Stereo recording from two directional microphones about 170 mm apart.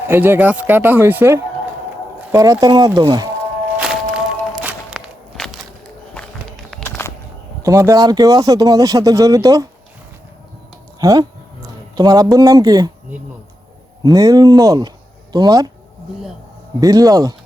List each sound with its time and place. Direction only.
0.1 s speech: 10° right (ahead or behind)
3.8 s walk: 5° right (ahead or behind)
6.1 s music: 5° left (ahead or behind)
6.8 s a sound: 15° left (ahead or behind)
7.6 s speech: 15° right (ahead or behind)
11.0 s speech: 20° right (ahead or behind)
14.0 s speech: 25° right (ahead or behind)
16.8 s speech: 20° right (ahead or behind)